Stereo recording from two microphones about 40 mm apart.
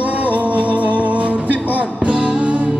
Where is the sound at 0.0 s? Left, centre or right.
Right.